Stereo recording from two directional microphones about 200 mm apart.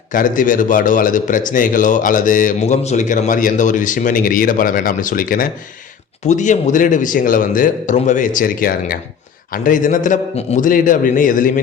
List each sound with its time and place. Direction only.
0.1 s a man's voice: 40° left (ahead or behind)